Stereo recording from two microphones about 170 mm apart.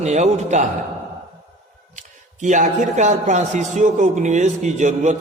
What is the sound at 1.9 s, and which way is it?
Speech, 45° right (ahead or behind).